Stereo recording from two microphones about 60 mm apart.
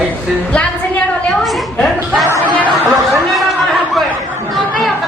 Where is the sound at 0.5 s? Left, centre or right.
Left.